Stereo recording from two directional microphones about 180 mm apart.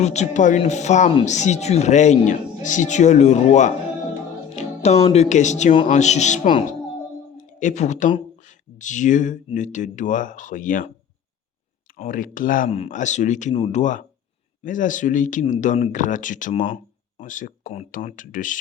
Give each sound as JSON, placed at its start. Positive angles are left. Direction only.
{"t": 0.0, "sound": "speech", "side_deg": 40}
{"t": 11.9, "sound": "speech", "side_deg": 50}
{"t": 12.7, "sound": "speech", "side_deg": 40}